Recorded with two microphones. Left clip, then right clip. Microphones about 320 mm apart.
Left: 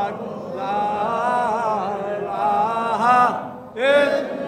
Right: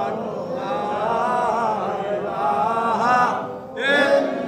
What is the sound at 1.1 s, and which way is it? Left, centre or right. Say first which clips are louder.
Chant: even; left.